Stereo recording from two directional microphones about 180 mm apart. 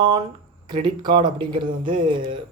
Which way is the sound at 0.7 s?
25° right (ahead or behind).